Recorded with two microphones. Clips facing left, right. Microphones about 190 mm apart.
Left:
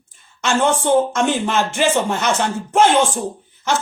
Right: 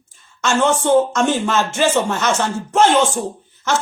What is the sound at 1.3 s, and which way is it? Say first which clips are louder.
A woman's voice: right 1 dB; 15° left (ahead or behind).